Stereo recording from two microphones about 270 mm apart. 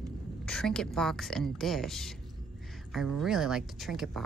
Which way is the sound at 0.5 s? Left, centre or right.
Centre.